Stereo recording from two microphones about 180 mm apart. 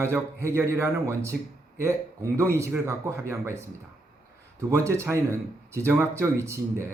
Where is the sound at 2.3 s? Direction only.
15° right (ahead or behind).